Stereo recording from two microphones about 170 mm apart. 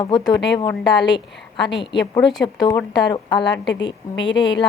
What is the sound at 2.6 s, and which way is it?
Speech, 25° left (ahead or behind).